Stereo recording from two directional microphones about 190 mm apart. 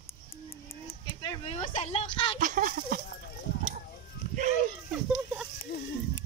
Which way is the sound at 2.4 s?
45° right (ahead or behind).